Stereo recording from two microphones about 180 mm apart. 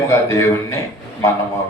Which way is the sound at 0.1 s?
15° left (ahead or behind).